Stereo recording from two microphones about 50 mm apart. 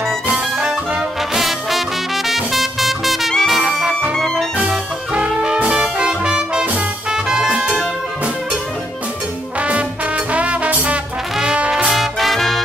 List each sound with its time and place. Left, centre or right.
0.3 s brass instrument: right
1.3 s music: centre
4.6 s brass instrument: right
7.1 s music: centre
9.6 s music: right
11.3 s brass instrument: right
11.7 s music: centre